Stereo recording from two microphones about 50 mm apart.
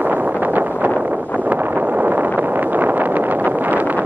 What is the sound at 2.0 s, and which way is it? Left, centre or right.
Wind noise, right.